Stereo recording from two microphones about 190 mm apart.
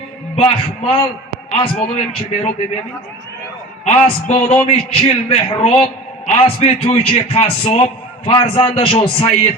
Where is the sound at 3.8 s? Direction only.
35° left (ahead or behind).